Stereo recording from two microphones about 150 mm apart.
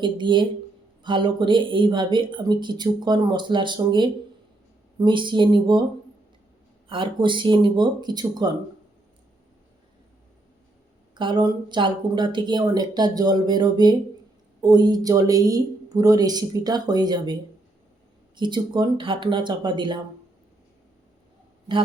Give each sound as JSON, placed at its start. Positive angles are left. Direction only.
{"t": 0.0, "sound": "speech", "side_deg": -30}
{"t": 6.8, "sound": "speech", "side_deg": -35}
{"t": 11.1, "sound": "speech", "side_deg": -30}
{"t": 18.3, "sound": "speech", "side_deg": -30}
{"t": 21.7, "sound": "speech", "side_deg": -30}